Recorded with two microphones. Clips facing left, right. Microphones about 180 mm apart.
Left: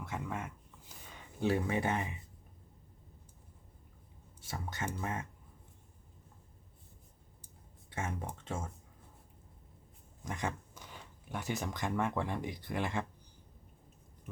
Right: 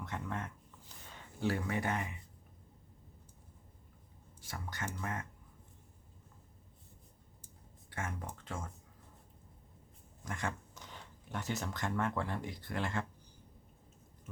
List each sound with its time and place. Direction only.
0.0 s speech: 10° left (ahead or behind)
1.4 s speech: 20° left (ahead or behind)
4.4 s speech: 25° left (ahead or behind)
7.9 s speech: 20° left (ahead or behind)
10.2 s speech: 15° left (ahead or behind)